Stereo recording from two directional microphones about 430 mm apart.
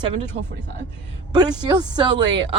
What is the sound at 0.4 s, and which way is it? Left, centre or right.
Speech, centre.